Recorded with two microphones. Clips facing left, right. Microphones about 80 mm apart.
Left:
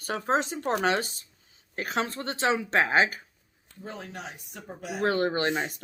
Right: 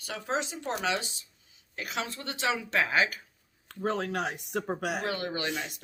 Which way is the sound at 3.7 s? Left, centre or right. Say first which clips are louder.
Right 9 dB; right.